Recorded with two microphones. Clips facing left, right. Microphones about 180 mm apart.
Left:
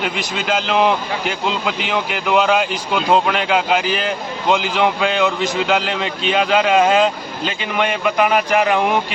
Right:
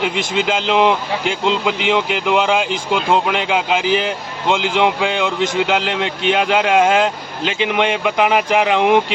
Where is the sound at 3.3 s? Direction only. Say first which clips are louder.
Left 1 dB; 15° right (ahead or behind).